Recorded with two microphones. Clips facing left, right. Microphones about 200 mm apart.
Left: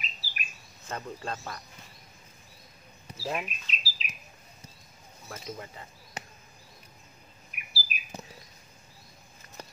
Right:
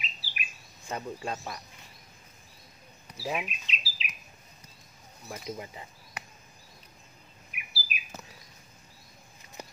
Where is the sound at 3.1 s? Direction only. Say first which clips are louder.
Even; 5° right (ahead or behind).